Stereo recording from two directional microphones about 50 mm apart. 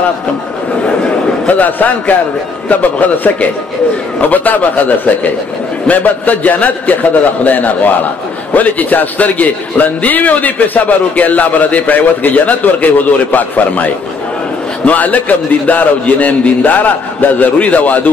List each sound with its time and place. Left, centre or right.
1.4 s a man's voice: left